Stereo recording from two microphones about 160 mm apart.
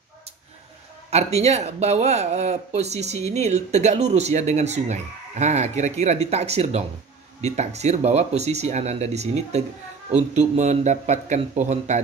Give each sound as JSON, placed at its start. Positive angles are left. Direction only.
{"t": 1.1, "sound": "speech", "side_deg": -40}